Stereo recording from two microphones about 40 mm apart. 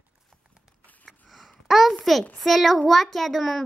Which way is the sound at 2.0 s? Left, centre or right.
Centre.